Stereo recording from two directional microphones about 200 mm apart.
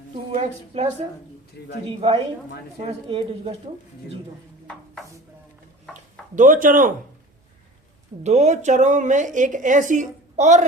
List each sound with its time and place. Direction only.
0.3 s speech: 35° right (ahead or behind)
1.6 s a man's voice: 55° left (ahead or behind)
2.0 s speech: 30° right (ahead or behind)
5.9 s a sound: 40° right (ahead or behind)
8.2 s speech: 35° right (ahead or behind)